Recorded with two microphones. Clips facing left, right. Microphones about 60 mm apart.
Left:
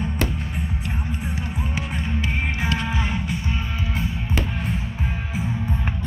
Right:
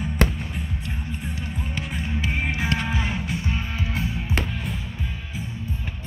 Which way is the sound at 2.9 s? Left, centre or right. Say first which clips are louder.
Left 1 dB; centre.